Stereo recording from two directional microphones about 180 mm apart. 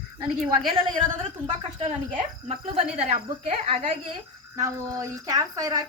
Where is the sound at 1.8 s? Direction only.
35° right (ahead or behind).